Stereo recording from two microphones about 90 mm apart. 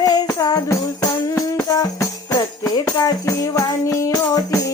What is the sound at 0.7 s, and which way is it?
Music, 40° left (ahead or behind).